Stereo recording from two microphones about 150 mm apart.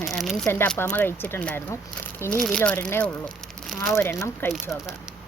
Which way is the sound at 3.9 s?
20° left (ahead or behind).